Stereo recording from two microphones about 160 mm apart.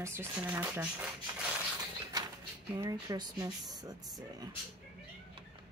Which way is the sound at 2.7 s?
20° right (ahead or behind).